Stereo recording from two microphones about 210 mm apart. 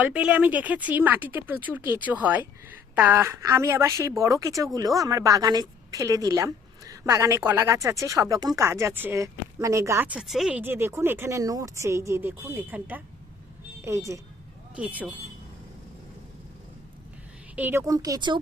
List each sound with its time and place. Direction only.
0.0 s a woman's voice: 5° right (ahead or behind)
17.5 s a woman's voice: 10° right (ahead or behind)